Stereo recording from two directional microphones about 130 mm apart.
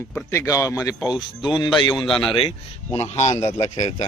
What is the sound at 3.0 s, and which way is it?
Speech, 60° left (ahead or behind).